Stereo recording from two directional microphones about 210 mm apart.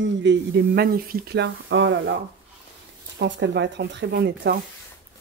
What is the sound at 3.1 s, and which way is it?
Speech, 55° right (ahead or behind).